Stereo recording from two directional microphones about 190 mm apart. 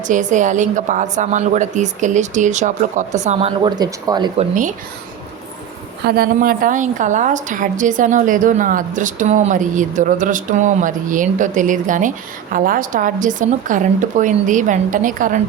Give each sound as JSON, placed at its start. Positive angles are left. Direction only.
{"t": 0.1, "sound": "a woman's voice", "side_deg": -40}
{"t": 3.6, "sound": "speech", "side_deg": -20}
{"t": 4.4, "sound": "a woman's voice", "side_deg": -40}
{"t": 6.1, "sound": "a woman's voice", "side_deg": -50}